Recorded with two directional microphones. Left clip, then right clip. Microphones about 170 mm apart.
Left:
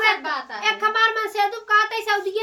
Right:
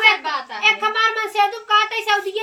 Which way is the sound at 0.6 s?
20° left (ahead or behind).